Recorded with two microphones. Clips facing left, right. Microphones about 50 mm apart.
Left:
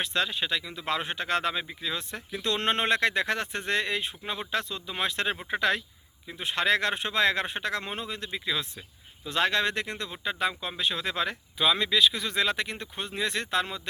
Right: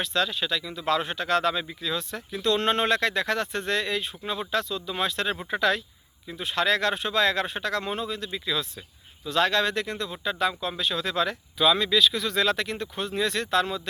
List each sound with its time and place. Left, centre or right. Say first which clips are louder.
0.0 s speech: right 2 dB; left